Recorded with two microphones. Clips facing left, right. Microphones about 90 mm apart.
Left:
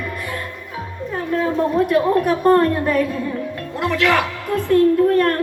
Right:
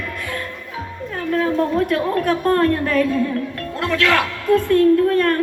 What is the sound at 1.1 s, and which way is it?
A woman's voice, 10° left (ahead or behind).